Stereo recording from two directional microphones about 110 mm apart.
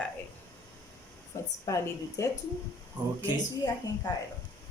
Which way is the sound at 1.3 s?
30° left (ahead or behind).